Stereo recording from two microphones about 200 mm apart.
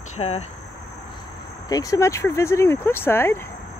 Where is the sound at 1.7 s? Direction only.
15° left (ahead or behind).